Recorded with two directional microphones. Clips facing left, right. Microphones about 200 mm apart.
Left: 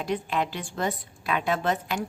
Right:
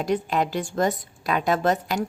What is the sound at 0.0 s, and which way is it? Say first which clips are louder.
A woman's voice: right 4 dB; 40° right (ahead or behind).